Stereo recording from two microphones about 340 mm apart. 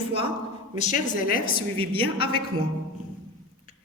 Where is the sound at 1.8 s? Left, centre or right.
Centre.